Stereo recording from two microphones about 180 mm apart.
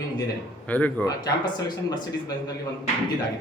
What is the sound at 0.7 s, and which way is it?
Speech, 10° left (ahead or behind).